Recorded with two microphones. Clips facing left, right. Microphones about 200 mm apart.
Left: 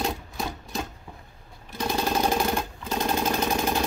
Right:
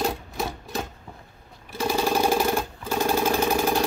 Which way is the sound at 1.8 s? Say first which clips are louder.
Right 2 dB; 10° right (ahead or behind).